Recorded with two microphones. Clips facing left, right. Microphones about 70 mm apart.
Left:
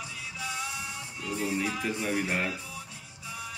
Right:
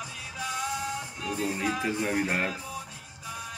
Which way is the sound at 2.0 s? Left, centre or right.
Right.